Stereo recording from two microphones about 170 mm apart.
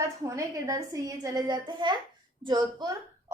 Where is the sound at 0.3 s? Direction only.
20° right (ahead or behind).